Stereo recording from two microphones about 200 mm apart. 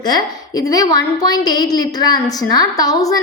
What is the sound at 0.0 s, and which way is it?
A woman's voice, 20° left (ahead or behind).